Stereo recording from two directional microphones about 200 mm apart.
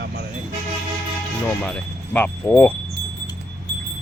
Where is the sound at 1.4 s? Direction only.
5° left (ahead or behind).